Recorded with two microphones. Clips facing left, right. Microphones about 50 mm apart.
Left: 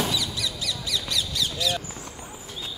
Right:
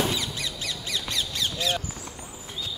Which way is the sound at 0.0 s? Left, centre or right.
Right.